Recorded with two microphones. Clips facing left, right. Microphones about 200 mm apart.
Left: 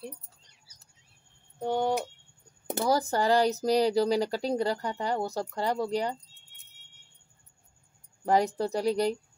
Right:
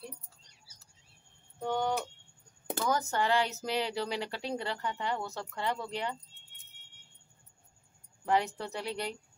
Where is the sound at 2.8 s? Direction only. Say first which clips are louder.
Left 5 dB; 35° left (ahead or behind).